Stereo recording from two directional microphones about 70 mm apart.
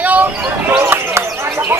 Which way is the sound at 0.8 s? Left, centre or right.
Right.